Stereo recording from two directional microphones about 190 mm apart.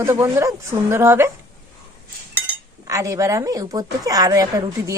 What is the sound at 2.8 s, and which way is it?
A woman's voice, 15° right (ahead or behind).